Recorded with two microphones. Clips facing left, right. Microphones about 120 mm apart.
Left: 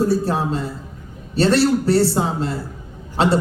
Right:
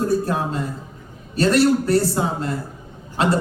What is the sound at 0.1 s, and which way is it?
A man's voice, 30° left (ahead or behind).